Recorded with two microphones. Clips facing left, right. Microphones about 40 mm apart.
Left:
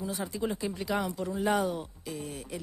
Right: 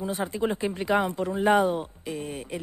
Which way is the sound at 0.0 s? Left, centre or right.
Right.